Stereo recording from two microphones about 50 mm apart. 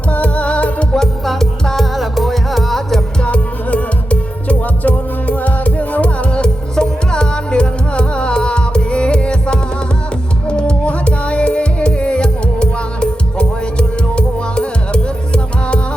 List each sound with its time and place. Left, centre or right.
0.1 s music: left
0.9 s music: centre
3.2 s music: left